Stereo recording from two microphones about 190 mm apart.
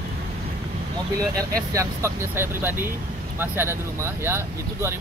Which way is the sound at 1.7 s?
15° right (ahead or behind).